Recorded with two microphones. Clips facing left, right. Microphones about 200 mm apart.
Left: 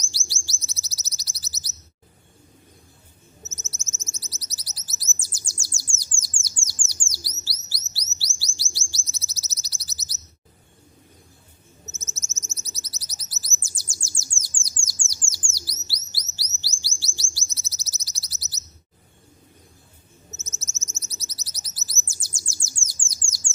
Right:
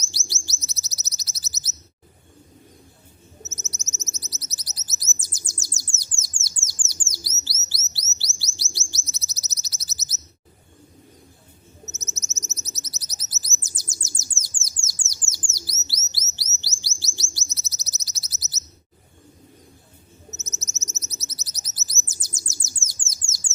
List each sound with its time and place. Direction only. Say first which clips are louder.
0.0 s bird: right 3 dB; 20° right (ahead or behind)
3.4 s bird: right 3 dB; 20° right (ahead or behind)
11.9 s bird: right 2 dB; 20° right (ahead or behind)
16.1 s chirp: right 1 dB; 20° right (ahead or behind)
20.3 s bird: right 1 dB; 20° right (ahead or behind)